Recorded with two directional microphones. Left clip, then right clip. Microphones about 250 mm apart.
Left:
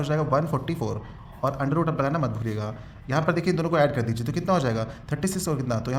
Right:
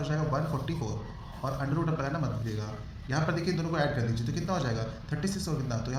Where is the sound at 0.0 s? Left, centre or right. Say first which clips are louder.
Left 8 dB; left.